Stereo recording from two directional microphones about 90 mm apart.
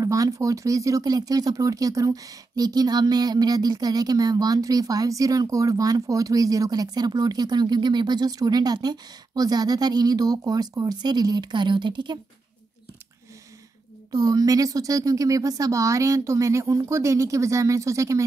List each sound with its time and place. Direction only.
0.0 s speech: 40° right (ahead or behind); by 12.2 s 60° right (ahead or behind)
14.1 s speech: 45° right (ahead or behind)